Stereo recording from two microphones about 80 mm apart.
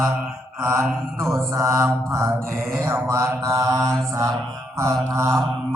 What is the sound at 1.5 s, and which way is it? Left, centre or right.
Mantra, right.